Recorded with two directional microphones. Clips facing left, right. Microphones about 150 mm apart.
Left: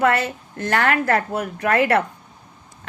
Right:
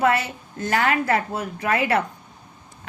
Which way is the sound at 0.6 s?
70° left (ahead or behind).